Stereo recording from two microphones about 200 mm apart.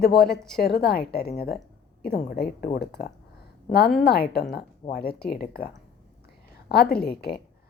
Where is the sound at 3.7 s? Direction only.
50° left (ahead or behind).